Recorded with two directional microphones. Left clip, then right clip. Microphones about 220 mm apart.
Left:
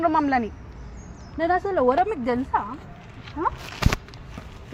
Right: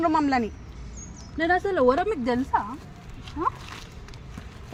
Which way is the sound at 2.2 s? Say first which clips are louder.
Left 1 dB; 30° right (ahead or behind).